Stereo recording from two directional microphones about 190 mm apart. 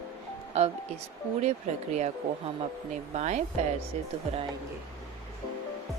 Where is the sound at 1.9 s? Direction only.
35° right (ahead or behind).